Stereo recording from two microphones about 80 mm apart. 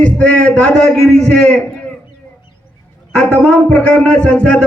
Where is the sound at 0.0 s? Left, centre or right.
Centre.